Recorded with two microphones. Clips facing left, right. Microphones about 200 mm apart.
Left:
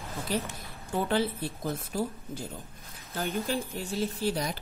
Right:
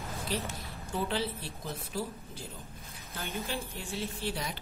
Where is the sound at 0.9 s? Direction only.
50° left (ahead or behind).